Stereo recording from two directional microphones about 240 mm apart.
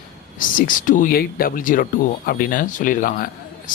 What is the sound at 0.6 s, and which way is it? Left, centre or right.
Speech, left.